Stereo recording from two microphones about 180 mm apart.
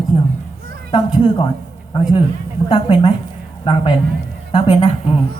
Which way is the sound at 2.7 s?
25° left (ahead or behind).